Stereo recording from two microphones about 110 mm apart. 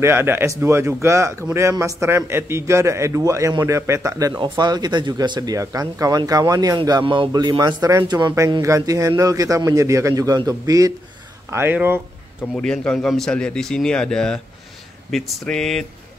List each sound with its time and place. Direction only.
0.0 s a man's voice: 20° right (ahead or behind)
4.4 s speech: 40° right (ahead or behind)
8.6 s speech: 30° right (ahead or behind)
11.5 s a man's voice: 20° right (ahead or behind)
12.5 s a man's voice: 5° left (ahead or behind)